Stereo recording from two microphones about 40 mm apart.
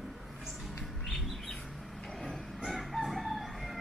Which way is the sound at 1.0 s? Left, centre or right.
Centre.